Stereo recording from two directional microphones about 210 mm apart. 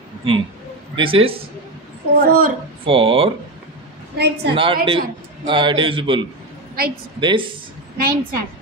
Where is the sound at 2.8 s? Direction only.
25° right (ahead or behind).